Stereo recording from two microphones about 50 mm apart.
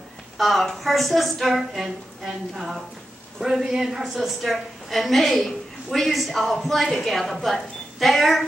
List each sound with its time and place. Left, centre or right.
0.4 s a woman's voice: centre